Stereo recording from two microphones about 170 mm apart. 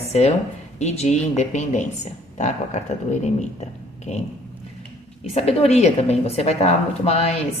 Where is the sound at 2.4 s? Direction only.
45° left (ahead or behind).